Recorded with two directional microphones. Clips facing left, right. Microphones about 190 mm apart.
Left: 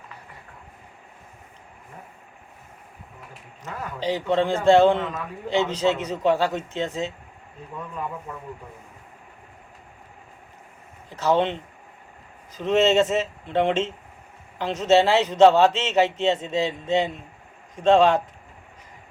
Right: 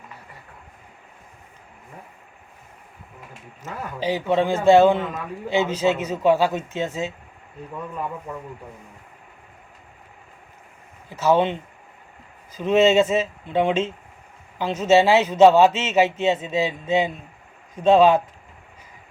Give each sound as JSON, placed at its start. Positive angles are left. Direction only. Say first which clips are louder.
{"t": 3.6, "sound": "a man's voice", "louder": "right 2 dB", "side_deg": -5}
{"t": 11.1, "sound": "speech", "louder": "right 2 dB", "side_deg": -5}
{"t": 12.5, "sound": "a man's voice", "louder": "right 2 dB", "side_deg": 0}